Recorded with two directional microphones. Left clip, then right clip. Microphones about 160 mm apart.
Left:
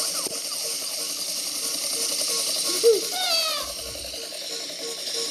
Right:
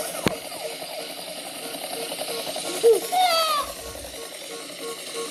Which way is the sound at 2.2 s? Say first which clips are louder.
Left 3 dB; 35° right (ahead or behind).